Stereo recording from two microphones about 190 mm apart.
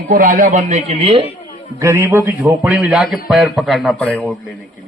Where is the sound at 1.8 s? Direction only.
15° right (ahead or behind).